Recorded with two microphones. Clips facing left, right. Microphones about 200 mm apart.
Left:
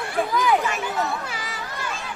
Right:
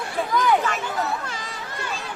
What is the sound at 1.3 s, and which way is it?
Chatter, 5° left (ahead or behind).